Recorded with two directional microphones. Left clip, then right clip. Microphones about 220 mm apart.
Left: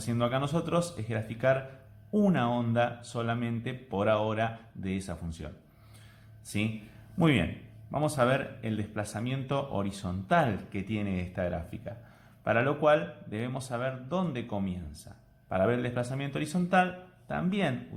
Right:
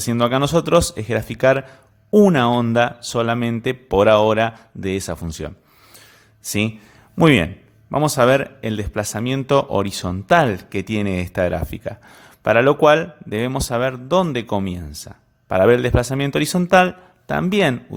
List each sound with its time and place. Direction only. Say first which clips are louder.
0.0 s speech: right 12 dB; 45° right (ahead or behind)